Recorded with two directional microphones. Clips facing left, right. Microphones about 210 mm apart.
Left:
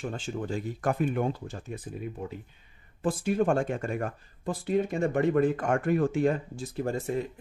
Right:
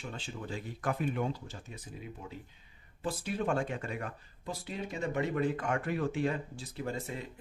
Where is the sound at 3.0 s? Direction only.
50° left (ahead or behind).